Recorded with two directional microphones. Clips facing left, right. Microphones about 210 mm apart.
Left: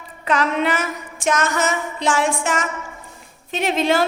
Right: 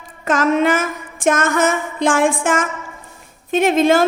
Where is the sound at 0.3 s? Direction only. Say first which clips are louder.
Right 5 dB; 45° right (ahead or behind).